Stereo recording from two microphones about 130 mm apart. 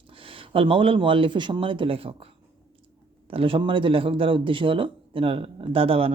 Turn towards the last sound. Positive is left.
turn(degrees=-45)  # may be behind; listen again after turning